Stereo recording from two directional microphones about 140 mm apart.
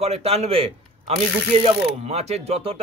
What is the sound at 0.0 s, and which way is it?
A man's voice, 45° right (ahead or behind).